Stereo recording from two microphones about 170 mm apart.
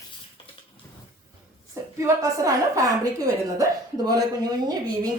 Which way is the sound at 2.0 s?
20° right (ahead or behind).